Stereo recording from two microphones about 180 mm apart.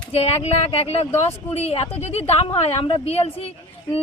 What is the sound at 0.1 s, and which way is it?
Speech, 35° left (ahead or behind).